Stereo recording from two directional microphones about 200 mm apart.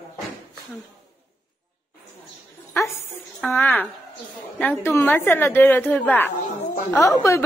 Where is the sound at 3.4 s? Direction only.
10° left (ahead or behind).